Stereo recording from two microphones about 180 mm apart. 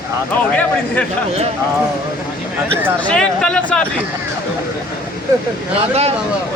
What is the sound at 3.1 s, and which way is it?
Speech, 5° left (ahead or behind).